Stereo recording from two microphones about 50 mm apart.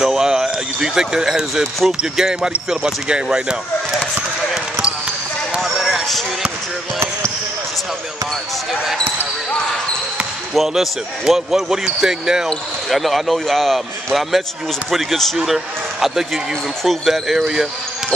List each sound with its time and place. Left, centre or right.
0.0 s speech: centre
5.6 s a sound: centre
10.7 s speech: centre
12.9 s speech: centre
17.1 s speech: centre